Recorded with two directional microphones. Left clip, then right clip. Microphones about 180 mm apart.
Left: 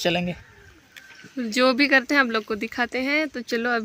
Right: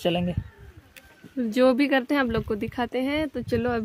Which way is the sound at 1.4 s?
25° right (ahead or behind).